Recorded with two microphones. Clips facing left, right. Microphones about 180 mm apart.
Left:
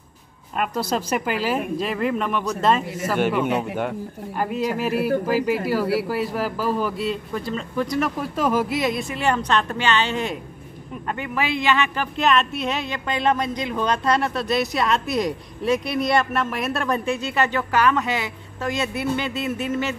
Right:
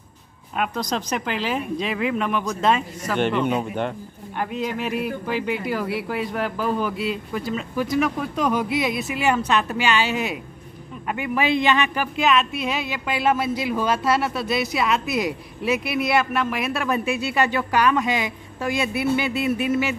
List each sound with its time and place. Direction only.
0.6 s a man's voice: 5° left (ahead or behind); by 12.1 s 15° right (ahead or behind)
12.2 s a woman's voice: centre (ahead or behind)